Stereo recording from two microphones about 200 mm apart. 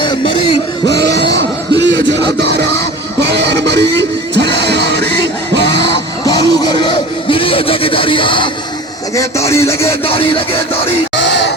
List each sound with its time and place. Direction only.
0.0 s music: 25° left (ahead or behind)
0.9 s music: 60° right (ahead or behind)
6.2 s music: 20° left (ahead or behind)
9.1 s speech: 15° left (ahead or behind)
11.2 s music: 60° left (ahead or behind)